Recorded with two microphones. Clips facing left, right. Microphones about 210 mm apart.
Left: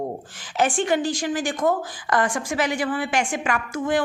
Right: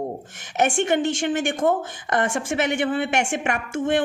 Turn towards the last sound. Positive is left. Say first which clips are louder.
# right 1 dB
turn(degrees=-25)  # may be behind; listen again after turning